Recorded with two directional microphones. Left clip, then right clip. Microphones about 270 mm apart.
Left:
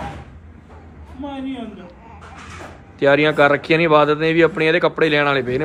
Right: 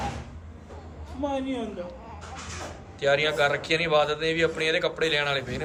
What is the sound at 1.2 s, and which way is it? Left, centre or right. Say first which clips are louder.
Speech: even; right.